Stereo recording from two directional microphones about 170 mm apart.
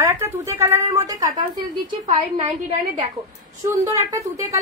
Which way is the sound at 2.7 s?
40° right (ahead or behind).